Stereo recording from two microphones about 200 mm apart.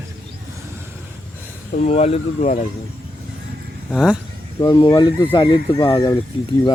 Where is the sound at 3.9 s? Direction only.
Centre (ahead or behind).